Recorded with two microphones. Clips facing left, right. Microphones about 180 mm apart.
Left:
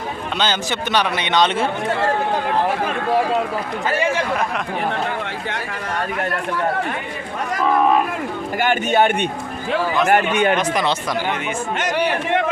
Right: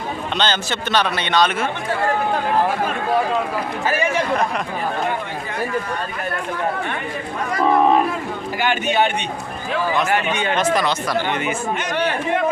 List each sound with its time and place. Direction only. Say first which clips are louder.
0.3 s a man's voice: even; 10° left (ahead or behind); by 2.0 s 25° left (ahead or behind)
8.5 s a man's voice: left 2 dB; 45° left (ahead or behind)